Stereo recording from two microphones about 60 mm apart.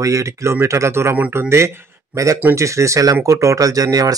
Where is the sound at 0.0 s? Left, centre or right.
Right.